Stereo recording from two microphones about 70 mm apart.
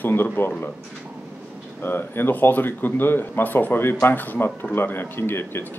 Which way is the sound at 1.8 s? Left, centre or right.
Left.